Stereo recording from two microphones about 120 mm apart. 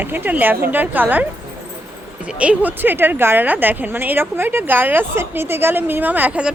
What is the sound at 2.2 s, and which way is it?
Speech, 10° right (ahead or behind).